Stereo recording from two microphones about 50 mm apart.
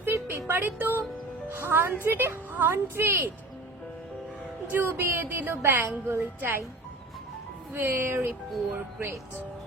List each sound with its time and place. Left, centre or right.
0.0 s a sound: right
0.3 s a woman's voice: right
4.7 s speech: right
7.7 s speech: right